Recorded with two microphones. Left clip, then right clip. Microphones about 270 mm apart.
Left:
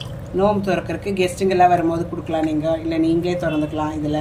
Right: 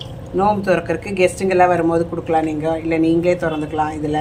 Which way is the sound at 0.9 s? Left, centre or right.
Right.